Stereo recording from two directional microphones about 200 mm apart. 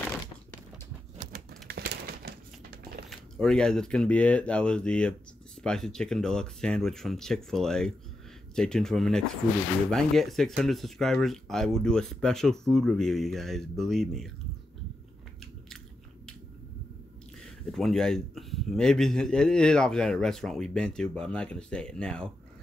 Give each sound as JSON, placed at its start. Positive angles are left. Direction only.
{"t": 1.1, "sound": "a sound", "side_deg": -45}
{"t": 3.1, "sound": "speech", "side_deg": 0}
{"t": 17.6, "sound": "speech", "side_deg": 0}